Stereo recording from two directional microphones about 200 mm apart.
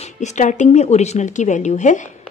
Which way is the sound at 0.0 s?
35° left (ahead or behind).